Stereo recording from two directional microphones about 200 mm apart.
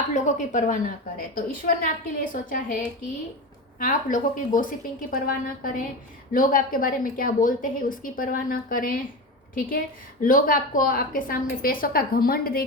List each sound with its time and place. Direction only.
0.1 s a woman's voice: 40° left (ahead or behind)
3.8 s a woman's voice: 45° left (ahead or behind)